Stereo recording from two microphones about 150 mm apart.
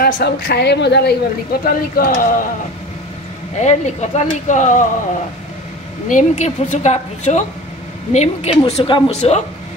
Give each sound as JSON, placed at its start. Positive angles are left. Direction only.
{"t": 0.0, "sound": "a woman's voice", "side_deg": 90}
{"t": 3.6, "sound": "speech", "side_deg": 50}
{"t": 6.0, "sound": "a woman's voice", "side_deg": 55}